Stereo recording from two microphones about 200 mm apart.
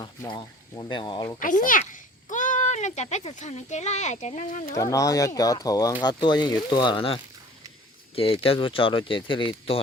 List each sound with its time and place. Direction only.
0.0 s speech: 20° left (ahead or behind)
1.4 s a child's voice: 40° left (ahead or behind)
4.7 s speech: 15° left (ahead or behind)